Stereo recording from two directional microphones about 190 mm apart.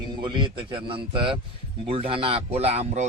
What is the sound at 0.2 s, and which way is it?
A man's voice, 25° right (ahead or behind).